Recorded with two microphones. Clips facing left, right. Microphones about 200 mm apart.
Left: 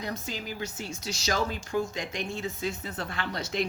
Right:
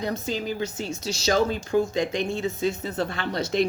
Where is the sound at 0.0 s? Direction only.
25° right (ahead or behind).